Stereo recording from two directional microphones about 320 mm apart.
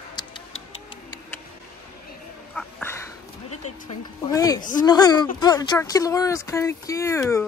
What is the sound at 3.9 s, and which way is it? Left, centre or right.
Speech, centre.